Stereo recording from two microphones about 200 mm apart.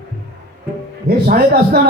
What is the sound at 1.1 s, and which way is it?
Speech, 50° right (ahead or behind).